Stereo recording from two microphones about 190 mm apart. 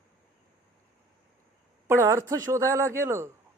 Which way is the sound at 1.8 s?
15° right (ahead or behind).